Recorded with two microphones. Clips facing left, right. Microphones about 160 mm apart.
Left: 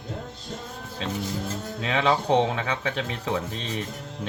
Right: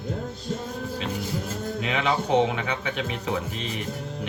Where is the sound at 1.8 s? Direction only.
35° left (ahead or behind).